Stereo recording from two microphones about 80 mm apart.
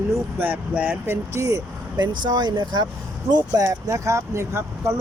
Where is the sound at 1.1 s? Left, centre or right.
Right.